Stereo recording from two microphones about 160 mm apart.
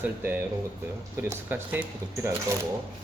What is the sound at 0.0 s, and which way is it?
Speech, 10° right (ahead or behind).